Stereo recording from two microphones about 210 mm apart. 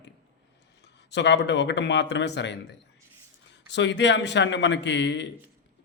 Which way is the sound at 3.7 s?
55° left (ahead or behind).